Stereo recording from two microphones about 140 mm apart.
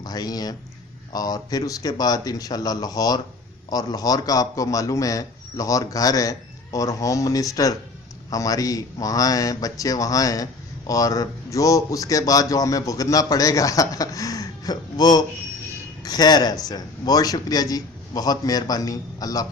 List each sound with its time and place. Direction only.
0.0 s speech: 30° left (ahead or behind)